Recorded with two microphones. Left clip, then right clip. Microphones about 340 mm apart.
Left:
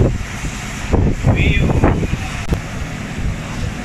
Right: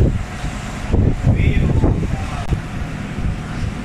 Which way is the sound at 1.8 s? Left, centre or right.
Left.